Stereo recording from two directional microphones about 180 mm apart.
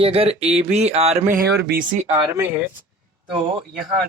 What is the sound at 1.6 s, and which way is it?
Speech, 55° right (ahead or behind).